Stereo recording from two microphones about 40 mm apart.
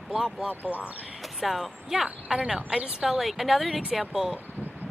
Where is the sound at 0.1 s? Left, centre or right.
Centre.